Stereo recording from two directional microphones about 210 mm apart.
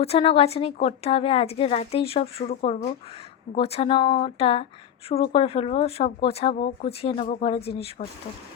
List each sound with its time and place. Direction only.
0.0 s speech: 25° left (ahead or behind)